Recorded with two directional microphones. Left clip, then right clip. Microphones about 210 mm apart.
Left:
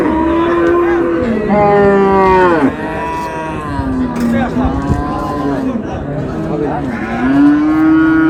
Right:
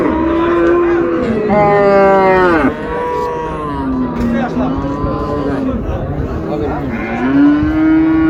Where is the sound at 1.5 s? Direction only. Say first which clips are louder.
Even; 15° right (ahead or behind).